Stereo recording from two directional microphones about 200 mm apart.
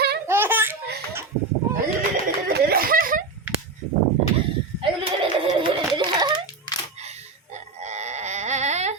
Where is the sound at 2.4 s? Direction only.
45° right (ahead or behind).